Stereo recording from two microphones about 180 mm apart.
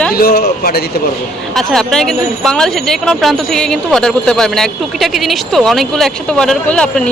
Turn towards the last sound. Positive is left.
turn(degrees=5)  # may be behind; listen again after turning